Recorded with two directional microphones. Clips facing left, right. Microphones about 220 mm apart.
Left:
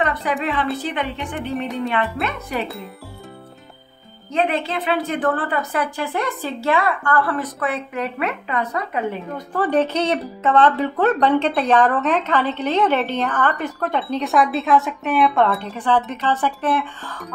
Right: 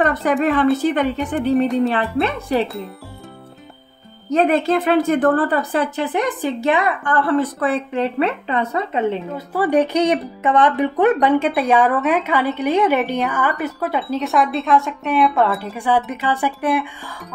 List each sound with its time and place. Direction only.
0.0 s speech: 45° right (ahead or behind)
1.9 s speech: 30° right (ahead or behind)
4.3 s a woman's voice: 45° right (ahead or behind); by 9.2 s 25° right (ahead or behind)
9.5 s speech: 10° right (ahead or behind)